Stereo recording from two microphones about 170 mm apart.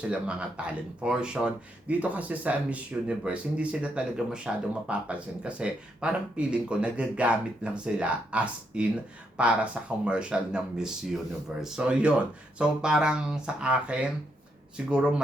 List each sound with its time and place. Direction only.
0.0 s speech: 5° right (ahead or behind)